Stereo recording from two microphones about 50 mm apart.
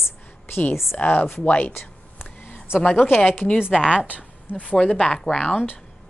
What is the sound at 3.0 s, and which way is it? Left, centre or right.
Speech, left.